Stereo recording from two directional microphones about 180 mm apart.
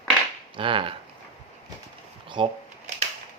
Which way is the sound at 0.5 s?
30° right (ahead or behind).